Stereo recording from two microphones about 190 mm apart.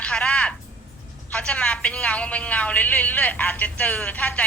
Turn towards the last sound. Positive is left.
turn(degrees=10)  # may be behind; listen again after turning